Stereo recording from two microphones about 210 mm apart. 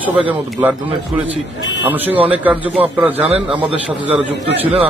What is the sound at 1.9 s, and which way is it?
Speech, 10° right (ahead or behind).